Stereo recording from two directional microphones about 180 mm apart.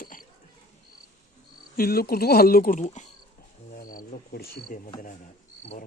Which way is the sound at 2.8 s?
40° left (ahead or behind).